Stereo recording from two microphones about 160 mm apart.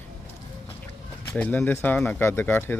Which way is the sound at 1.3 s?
10° left (ahead or behind).